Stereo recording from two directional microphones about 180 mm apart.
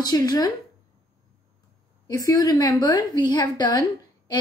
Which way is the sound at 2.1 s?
20° left (ahead or behind).